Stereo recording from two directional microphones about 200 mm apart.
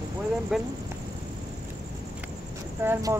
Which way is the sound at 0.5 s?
Centre (ahead or behind).